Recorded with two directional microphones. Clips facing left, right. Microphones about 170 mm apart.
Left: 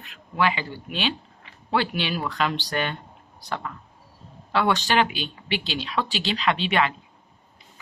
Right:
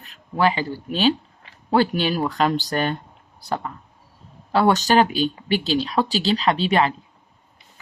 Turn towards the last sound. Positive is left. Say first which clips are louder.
# right 4 dB
turn(degrees=-35)  # may be behind; listen again after turning